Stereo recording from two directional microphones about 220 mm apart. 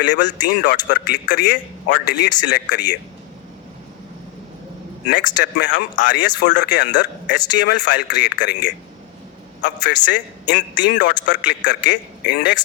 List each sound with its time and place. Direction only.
0.0 s a man's voice: 50° left (ahead or behind)
5.4 s a man's voice: 50° left (ahead or behind)
9.6 s a man's voice: 55° left (ahead or behind)